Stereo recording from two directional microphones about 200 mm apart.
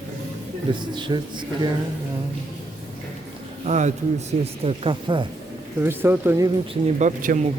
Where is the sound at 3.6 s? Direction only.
35° right (ahead or behind).